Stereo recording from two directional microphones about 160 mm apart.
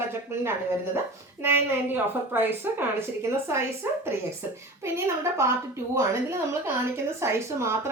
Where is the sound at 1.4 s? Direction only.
15° right (ahead or behind).